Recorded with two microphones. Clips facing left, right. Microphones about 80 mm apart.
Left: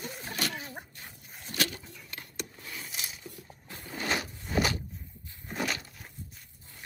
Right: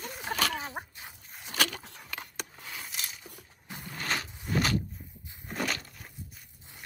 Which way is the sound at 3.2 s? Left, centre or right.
Centre.